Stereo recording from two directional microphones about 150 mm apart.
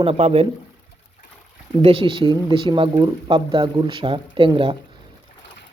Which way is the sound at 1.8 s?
35° right (ahead or behind).